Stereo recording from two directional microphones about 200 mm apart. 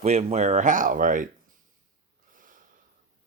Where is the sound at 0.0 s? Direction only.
30° right (ahead or behind).